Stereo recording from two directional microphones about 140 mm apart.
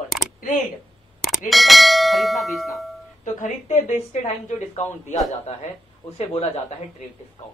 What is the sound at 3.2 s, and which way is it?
A woman's voice, 65° left (ahead or behind).